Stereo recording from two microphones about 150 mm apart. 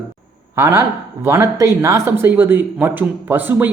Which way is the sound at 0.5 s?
15° right (ahead or behind).